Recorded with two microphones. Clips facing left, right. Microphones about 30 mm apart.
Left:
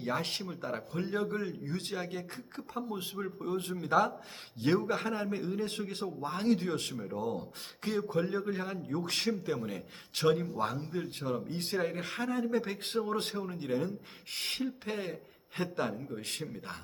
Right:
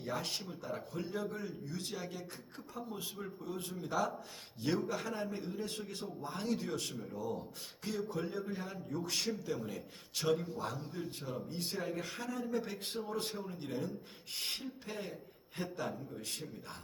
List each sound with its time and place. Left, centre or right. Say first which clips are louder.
0.0 s a man's voice: left 5 dB; left